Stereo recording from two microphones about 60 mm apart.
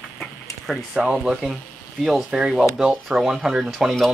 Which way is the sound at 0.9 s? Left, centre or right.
Centre.